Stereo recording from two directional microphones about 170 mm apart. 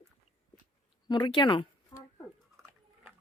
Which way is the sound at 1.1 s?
25° left (ahead or behind).